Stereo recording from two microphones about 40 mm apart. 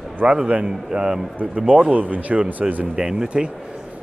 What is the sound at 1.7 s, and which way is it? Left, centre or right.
Speech, right.